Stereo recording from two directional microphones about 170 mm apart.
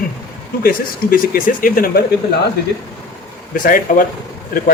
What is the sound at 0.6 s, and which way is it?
A man's voice, 55° left (ahead or behind).